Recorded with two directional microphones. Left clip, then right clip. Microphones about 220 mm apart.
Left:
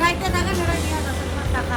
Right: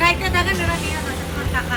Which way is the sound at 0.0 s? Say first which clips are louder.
Right 3 dB; 50° left (ahead or behind).